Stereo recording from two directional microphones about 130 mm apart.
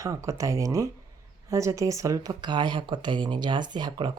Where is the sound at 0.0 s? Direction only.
25° right (ahead or behind).